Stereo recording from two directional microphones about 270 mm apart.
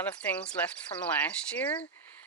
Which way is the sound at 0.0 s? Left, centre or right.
Centre.